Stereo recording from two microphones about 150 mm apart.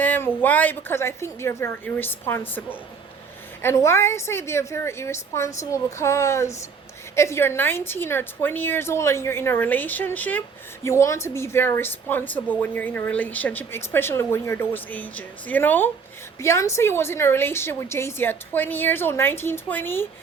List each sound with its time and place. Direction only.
0.0 s speech: 10° left (ahead or behind)